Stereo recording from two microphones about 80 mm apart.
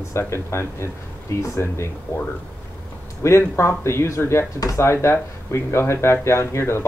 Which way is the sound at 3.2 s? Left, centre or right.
Left.